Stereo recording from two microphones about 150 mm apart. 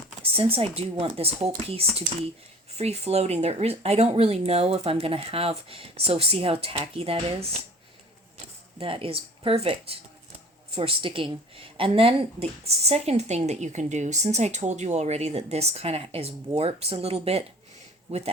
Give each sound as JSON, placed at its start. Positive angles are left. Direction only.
{"t": 0.2, "sound": "speech", "side_deg": -40}
{"t": 8.8, "sound": "speech", "side_deg": -40}